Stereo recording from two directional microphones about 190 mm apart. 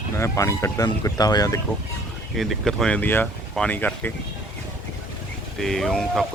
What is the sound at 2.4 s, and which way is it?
Speech, centre (ahead or behind).